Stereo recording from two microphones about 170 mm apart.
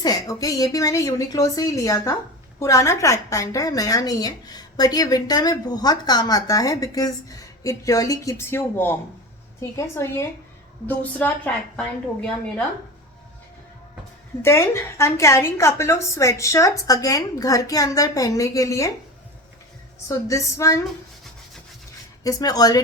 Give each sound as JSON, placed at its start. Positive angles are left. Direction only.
{"t": 0.0, "sound": "a woman's voice", "side_deg": 20}
{"t": 14.4, "sound": "a woman's voice", "side_deg": 15}
{"t": 20.1, "sound": "a woman's voice", "side_deg": 20}
{"t": 22.2, "sound": "a woman's voice", "side_deg": 20}